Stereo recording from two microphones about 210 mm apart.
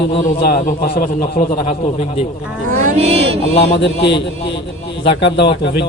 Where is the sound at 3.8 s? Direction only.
55° left (ahead or behind).